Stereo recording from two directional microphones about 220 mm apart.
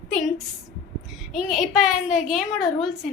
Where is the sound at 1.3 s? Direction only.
Centre (ahead or behind).